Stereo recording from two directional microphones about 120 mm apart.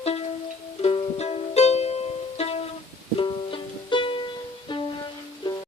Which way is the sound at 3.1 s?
45° left (ahead or behind).